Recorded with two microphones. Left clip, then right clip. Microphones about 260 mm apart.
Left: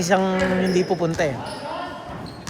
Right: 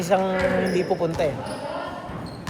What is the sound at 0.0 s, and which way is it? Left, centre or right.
Speech, left.